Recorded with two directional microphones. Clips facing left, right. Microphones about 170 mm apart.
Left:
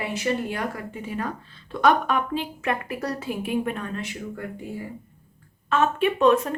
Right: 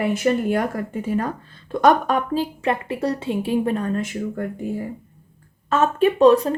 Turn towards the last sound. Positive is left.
turn(degrees=-35)  # may be behind; listen again after turning